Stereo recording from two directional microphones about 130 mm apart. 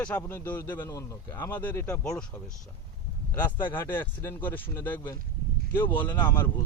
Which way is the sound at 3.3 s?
15° left (ahead or behind).